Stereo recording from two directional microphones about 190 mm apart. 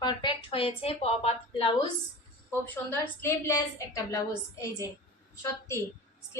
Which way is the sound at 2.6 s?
10° left (ahead or behind).